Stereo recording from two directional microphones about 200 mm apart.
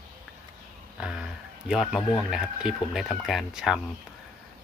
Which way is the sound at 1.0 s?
5° right (ahead or behind).